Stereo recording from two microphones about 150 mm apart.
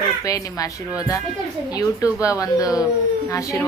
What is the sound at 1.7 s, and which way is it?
Speech, 20° left (ahead or behind).